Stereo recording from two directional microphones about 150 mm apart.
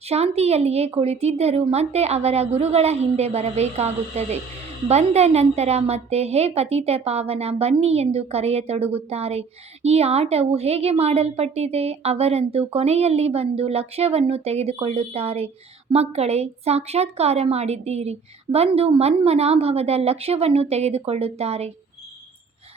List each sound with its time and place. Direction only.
0.1 s a woman's voice: 45° right (ahead or behind)